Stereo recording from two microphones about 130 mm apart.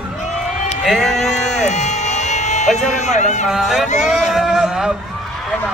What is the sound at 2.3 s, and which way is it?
Music, 65° left (ahead or behind).